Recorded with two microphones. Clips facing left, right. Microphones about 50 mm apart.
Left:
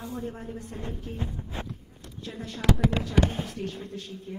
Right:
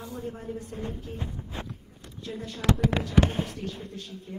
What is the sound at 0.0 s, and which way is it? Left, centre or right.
A man's voice, left.